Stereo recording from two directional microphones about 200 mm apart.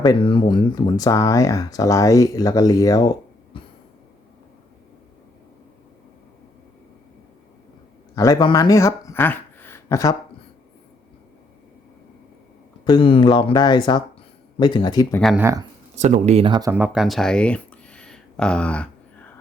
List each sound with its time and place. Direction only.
0.0 s speech: 20° left (ahead or behind)
3.5 s cough: 25° left (ahead or behind)
8.1 s speech: 15° left (ahead or behind)
12.8 s speech: 25° left (ahead or behind)
15.2 s speech: centre (ahead or behind)
16.0 s speech: 35° right (ahead or behind)
16.7 s a sound: 5° right (ahead or behind)